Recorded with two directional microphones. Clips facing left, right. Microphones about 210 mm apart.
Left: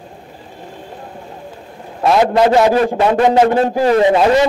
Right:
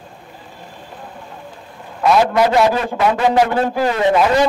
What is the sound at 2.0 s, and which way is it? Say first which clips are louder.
A man's voice: left 2 dB; 30° left (ahead or behind).